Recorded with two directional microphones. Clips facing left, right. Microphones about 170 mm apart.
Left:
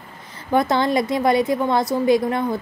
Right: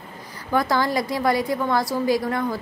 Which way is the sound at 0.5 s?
20° left (ahead or behind).